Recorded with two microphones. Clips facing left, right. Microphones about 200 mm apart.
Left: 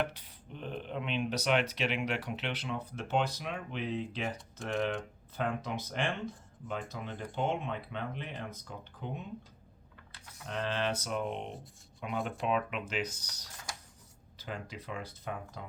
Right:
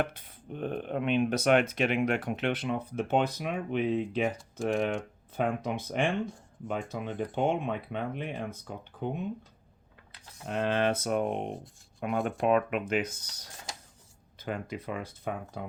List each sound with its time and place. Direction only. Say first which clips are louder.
0.0 s speech: right 3 dB; 50° right (ahead or behind)
10.5 s speech: right 6 dB; 50° right (ahead or behind)